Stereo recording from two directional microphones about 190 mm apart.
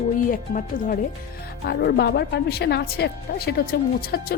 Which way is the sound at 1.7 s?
55° left (ahead or behind).